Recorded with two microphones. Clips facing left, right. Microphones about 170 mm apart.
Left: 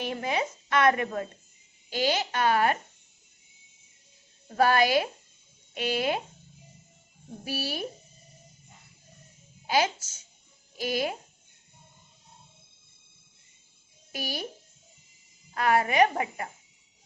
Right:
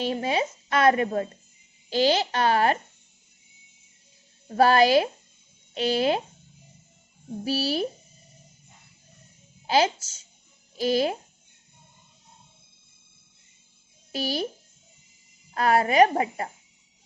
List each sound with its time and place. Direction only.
0.0 s a woman's voice: 25° right (ahead or behind)
4.4 s a woman's voice: 35° right (ahead or behind)
7.4 s a woman's voice: 30° right (ahead or behind)
9.6 s a woman's voice: 30° right (ahead or behind)
14.1 s a woman's voice: 30° right (ahead or behind)
15.5 s a woman's voice: 35° right (ahead or behind)